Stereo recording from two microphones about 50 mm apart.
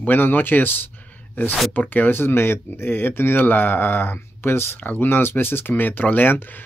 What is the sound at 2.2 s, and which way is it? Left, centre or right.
Speech, left.